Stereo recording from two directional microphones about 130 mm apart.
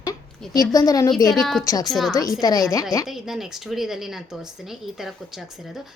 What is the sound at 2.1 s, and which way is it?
Speech, 30° left (ahead or behind).